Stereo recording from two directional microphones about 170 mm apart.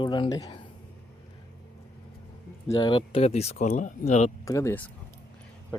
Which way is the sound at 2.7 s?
25° left (ahead or behind).